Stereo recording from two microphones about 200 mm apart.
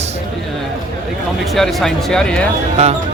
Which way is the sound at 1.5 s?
Centre (ahead or behind).